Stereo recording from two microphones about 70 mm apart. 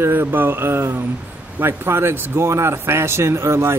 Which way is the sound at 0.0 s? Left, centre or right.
Right.